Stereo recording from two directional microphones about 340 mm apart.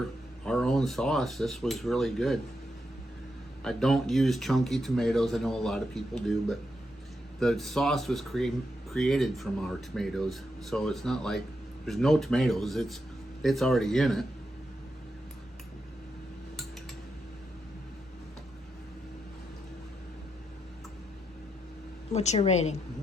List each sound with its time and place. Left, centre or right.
0.4 s speech: centre
3.6 s speech: centre
22.1 s a woman's voice: centre